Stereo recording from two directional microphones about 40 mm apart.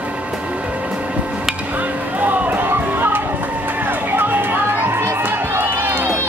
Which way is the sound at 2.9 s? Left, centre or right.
Right.